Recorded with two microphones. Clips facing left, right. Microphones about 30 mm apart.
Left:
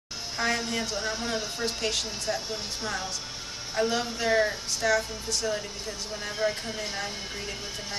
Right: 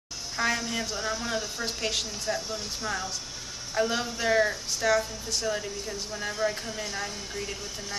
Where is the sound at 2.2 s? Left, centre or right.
Centre.